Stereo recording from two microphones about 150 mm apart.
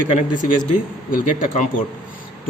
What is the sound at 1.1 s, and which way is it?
Speech, 65° left (ahead or behind).